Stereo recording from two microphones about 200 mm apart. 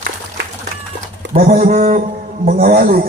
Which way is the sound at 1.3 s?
45° right (ahead or behind).